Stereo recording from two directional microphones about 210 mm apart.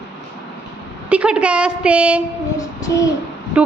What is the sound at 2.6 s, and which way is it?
Child singing, 15° left (ahead or behind).